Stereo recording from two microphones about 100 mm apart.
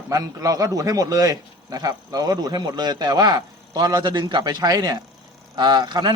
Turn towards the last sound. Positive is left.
turn(degrees=-45)  # may be behind; listen again after turning